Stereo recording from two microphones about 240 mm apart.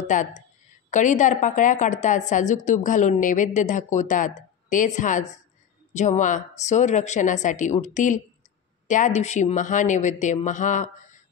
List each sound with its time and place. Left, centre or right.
0.0 s a woman's voice: left